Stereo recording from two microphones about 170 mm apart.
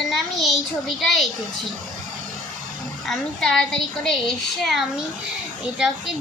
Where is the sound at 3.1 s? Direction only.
5° left (ahead or behind).